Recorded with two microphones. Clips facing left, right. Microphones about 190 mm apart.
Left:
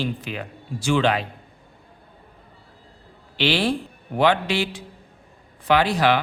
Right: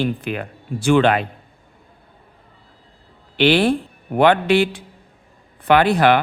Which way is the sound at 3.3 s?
55° right (ahead or behind).